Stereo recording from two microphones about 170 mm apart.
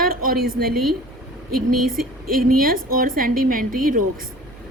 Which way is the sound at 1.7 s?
55° right (ahead or behind).